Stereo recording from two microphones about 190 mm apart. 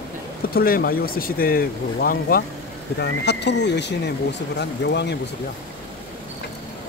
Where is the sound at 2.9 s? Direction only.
60° left (ahead or behind).